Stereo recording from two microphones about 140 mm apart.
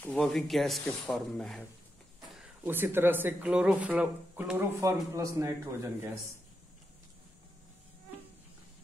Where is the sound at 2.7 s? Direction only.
15° right (ahead or behind).